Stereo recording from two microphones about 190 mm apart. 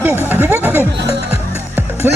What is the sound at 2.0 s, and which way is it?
Speech, 10° right (ahead or behind).